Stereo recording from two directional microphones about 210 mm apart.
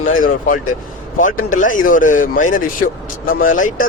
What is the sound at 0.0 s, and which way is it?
Speech, 40° left (ahead or behind).